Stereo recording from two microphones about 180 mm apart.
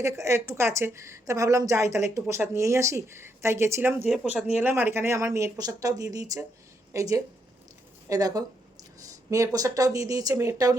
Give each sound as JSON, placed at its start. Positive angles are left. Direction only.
{"t": 0.0, "sound": "a woman's voice", "side_deg": -15}
{"t": 4.0, "sound": "a woman's voice", "side_deg": 0}